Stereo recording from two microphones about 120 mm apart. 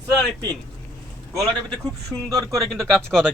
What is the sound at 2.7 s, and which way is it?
Speech, 5° left (ahead or behind).